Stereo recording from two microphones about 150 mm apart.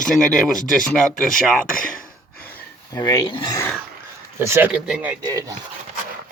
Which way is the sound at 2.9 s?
25° left (ahead or behind).